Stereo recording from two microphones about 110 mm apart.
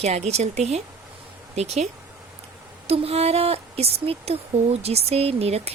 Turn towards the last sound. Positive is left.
turn(degrees=-70)  # may be behind; listen again after turning